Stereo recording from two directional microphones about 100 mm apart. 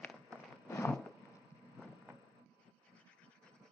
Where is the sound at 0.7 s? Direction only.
25° left (ahead or behind).